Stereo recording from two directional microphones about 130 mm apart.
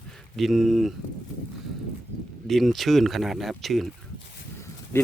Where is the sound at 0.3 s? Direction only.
Centre (ahead or behind).